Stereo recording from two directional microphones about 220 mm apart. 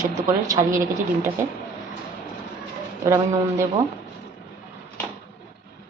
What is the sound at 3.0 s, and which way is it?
Speech, 15° right (ahead or behind).